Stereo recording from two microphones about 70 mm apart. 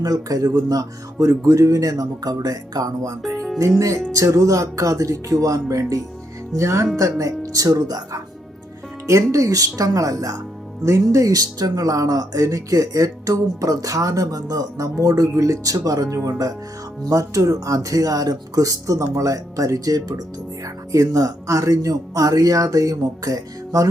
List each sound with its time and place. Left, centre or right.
0.0 s speech: right
9.0 s speech: right
20.9 s speech: right